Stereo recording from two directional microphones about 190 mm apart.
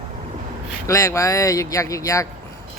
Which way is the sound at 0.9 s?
15° left (ahead or behind).